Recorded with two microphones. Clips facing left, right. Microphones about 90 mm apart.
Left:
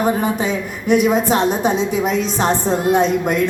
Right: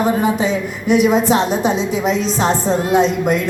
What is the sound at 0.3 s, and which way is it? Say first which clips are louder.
A woman's voice: right 2 dB; 45° left (ahead or behind).